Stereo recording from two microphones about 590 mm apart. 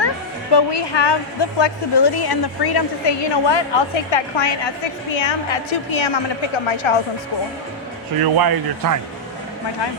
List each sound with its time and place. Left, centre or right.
0.5 s a woman's voice: left
8.2 s speech: right